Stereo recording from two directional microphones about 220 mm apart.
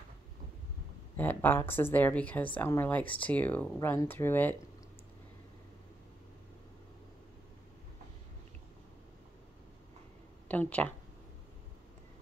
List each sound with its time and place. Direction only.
1.1 s a woman's voice: 10° left (ahead or behind)
10.5 s a woman's voice: 5° left (ahead or behind)